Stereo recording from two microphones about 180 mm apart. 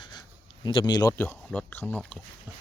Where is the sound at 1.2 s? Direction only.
5° left (ahead or behind).